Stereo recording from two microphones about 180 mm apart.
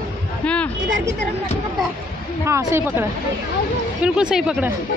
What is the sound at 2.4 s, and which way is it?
Speech, 15° right (ahead or behind).